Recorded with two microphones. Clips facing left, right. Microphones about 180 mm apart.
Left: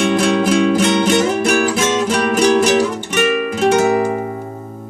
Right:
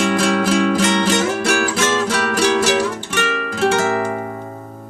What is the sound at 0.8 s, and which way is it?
Music, 10° left (ahead or behind).